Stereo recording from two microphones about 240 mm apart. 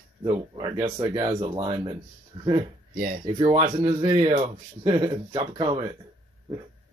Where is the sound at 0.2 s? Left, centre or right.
Centre.